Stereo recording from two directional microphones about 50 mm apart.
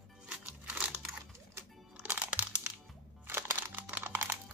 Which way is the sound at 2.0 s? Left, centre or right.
Right.